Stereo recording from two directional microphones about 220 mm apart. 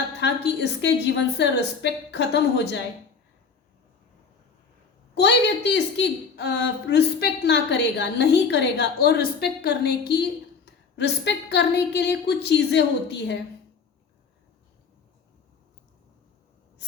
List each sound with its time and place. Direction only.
0.2 s a woman's voice: 50° left (ahead or behind)
5.1 s a woman's voice: 50° left (ahead or behind)